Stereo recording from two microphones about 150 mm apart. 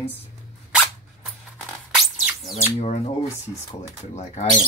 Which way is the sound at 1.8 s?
5° right (ahead or behind).